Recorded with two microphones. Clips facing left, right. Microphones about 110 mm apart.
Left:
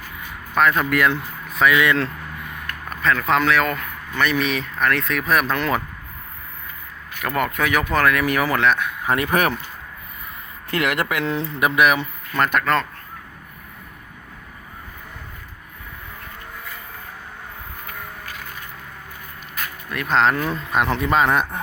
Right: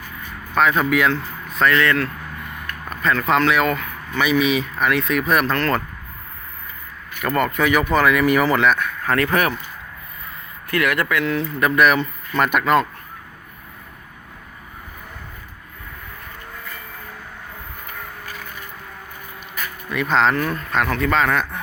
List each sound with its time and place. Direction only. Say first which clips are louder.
0.5 s speech: right 1 dB; centre (ahead or behind)
2.9 s speech: right 1 dB; centre (ahead or behind)
5.5 s a man's voice: right 1 dB; 10° left (ahead or behind)
7.2 s speech: right 3 dB; 5° left (ahead or behind)
9.0 s speech: right 1 dB; 15° left (ahead or behind)
10.7 s speech: right 2 dB; 25° left (ahead or behind)
12.4 s speech: right 3 dB; 5° right (ahead or behind)
19.9 s a man's voice: right 1 dB; centre (ahead or behind); by 21.6 s 25° left (ahead or behind)